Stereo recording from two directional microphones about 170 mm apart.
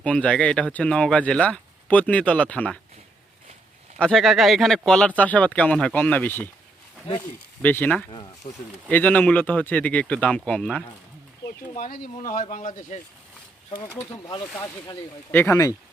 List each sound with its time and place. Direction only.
0.0 s speech: 5° left (ahead or behind)
3.9 s speech: centre (ahead or behind)
8.4 s speech: 30° left (ahead or behind)
8.9 s speech: 10° left (ahead or behind)
11.7 s speech: 50° left (ahead or behind)
13.7 s speech: 25° left (ahead or behind)